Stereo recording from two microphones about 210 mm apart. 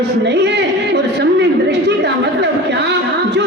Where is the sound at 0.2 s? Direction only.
55° right (ahead or behind).